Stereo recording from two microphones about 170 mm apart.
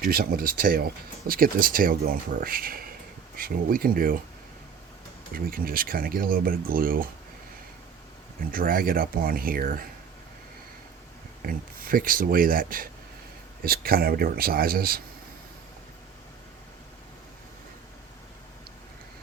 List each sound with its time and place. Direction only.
0.0 s speech: 60° right (ahead or behind)
5.3 s speech: 60° right (ahead or behind)
8.5 s speech: 55° right (ahead or behind)
11.4 s speech: 55° right (ahead or behind)